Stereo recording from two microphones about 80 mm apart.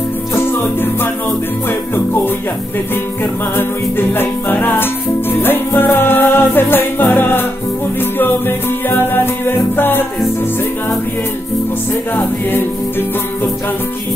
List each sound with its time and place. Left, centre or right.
4.1 s music: left